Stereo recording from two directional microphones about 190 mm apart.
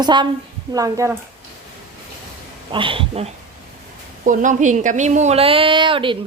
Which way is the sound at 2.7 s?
25° right (ahead or behind).